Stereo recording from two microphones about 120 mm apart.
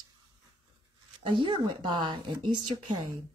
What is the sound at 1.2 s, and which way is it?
Speech, 40° right (ahead or behind).